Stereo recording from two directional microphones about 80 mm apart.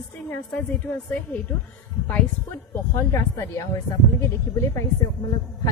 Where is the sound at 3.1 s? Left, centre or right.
Left.